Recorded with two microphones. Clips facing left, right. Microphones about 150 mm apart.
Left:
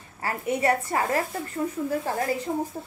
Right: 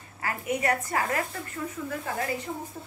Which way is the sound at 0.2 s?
30° left (ahead or behind).